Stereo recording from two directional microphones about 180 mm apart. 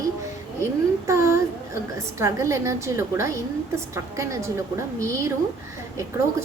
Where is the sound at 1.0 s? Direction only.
15° right (ahead or behind).